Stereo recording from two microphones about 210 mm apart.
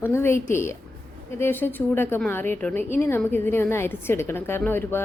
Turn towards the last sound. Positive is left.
turn(degrees=10)  # may be behind; listen again after turning